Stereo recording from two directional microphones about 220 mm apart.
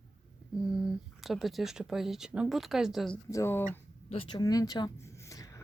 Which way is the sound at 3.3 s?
10° left (ahead or behind).